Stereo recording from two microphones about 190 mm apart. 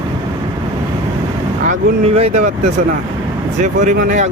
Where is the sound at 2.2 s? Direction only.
35° right (ahead or behind).